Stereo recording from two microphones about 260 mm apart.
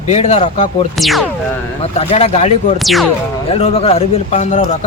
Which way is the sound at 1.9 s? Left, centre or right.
Left.